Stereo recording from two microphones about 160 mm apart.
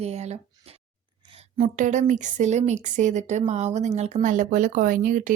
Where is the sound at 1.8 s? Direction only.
50° right (ahead or behind).